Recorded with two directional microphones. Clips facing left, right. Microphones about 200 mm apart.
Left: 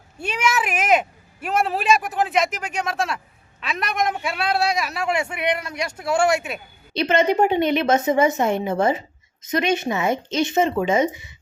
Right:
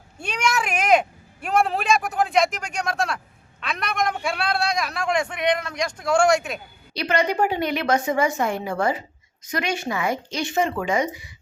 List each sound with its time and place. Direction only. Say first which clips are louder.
0.2 s a man's voice: left 2 dB; 5° left (ahead or behind)
6.9 s a woman's voice: left 4 dB; 25° left (ahead or behind)